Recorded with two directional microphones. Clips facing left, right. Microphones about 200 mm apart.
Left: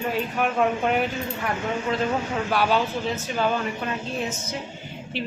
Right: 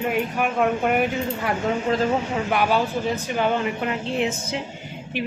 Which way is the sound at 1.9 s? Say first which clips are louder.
Right 3 dB; 30° right (ahead or behind).